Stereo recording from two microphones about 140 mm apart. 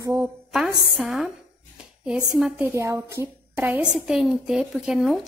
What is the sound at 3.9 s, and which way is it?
A woman's voice, 5° right (ahead or behind).